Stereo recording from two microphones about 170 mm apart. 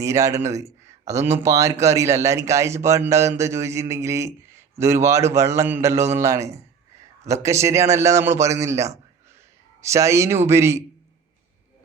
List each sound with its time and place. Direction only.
0.0 s a man's voice: 15° right (ahead or behind)